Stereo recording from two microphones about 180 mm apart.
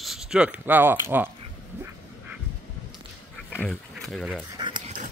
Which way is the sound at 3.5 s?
5° left (ahead or behind).